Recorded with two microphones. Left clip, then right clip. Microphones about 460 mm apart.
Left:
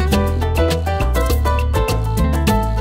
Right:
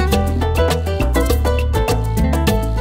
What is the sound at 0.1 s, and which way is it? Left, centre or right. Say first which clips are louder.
Music: right 1 dB; right.